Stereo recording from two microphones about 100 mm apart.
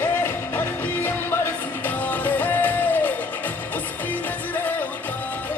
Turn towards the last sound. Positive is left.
turn(degrees=20)  # may be behind; listen again after turning